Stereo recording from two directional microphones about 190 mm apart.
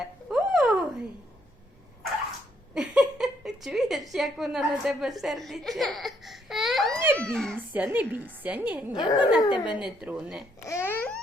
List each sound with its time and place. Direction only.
0.0 s a sound: centre (ahead or behind)
2.7 s a woman's voice: 5° right (ahead or behind)
7.7 s a woman's voice: 10° right (ahead or behind)
8.9 s speech: 20° left (ahead or behind)
9.8 s speech: 5° right (ahead or behind)
10.6 s a sound: 15° left (ahead or behind)